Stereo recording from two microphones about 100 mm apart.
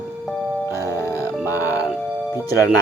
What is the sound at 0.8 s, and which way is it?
Music, 30° left (ahead or behind).